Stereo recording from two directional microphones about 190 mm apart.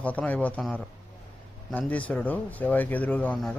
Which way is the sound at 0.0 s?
5° left (ahead or behind).